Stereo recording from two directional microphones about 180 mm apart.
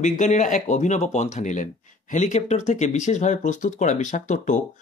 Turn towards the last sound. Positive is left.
turn(degrees=45)  # may be behind; listen again after turning